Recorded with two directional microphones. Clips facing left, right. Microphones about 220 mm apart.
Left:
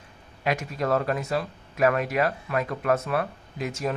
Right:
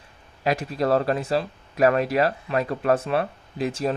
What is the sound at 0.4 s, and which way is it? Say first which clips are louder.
Speech: right 4 dB; 35° right (ahead or behind).